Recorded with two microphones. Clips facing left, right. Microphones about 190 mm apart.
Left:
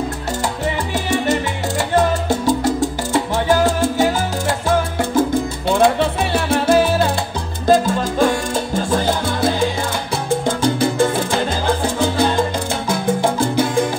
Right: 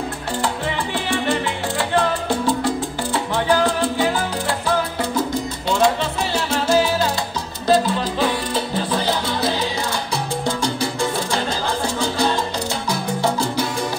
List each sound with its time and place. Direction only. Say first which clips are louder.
0.9 s salsa music: left 3 dB; 45° left (ahead or behind)